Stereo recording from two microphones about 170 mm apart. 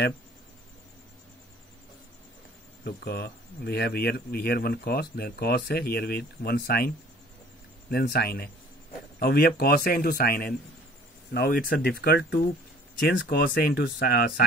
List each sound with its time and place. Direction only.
2.8 s speech: 70° left (ahead or behind)
7.9 s speech: 70° left (ahead or behind)